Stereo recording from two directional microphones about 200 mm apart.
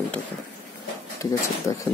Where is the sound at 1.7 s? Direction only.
15° left (ahead or behind).